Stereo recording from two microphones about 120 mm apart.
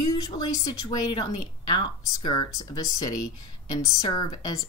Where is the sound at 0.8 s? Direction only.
40° left (ahead or behind).